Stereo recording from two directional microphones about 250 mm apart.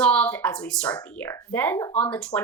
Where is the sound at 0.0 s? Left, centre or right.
Centre.